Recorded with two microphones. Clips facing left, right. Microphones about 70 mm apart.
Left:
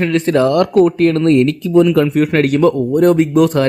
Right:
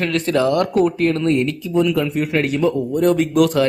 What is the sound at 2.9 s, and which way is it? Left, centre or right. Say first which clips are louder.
Speech: left 5 dB; left.